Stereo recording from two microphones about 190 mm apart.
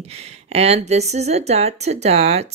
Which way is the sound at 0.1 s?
35° right (ahead or behind).